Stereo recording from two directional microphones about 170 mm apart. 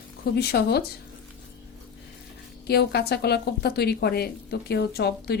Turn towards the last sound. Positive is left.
turn(degrees=70)  # may be behind; listen again after turning